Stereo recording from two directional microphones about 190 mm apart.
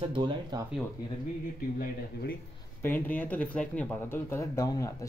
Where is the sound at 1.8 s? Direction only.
50° left (ahead or behind).